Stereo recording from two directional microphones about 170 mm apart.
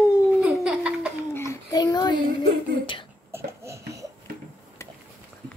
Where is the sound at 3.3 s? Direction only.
15° right (ahead or behind).